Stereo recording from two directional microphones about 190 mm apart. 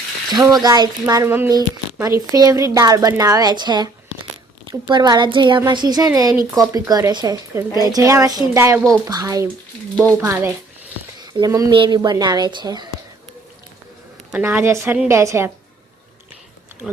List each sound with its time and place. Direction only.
0.3 s a child's voice: 20° right (ahead or behind)
14.3 s a woman's voice: 10° right (ahead or behind)